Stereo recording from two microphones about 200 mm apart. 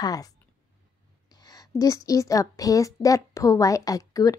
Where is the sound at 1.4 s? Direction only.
20° left (ahead or behind).